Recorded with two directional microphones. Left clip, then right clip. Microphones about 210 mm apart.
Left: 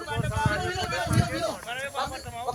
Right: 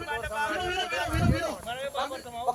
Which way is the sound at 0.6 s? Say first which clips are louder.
Even; 10° right (ahead or behind).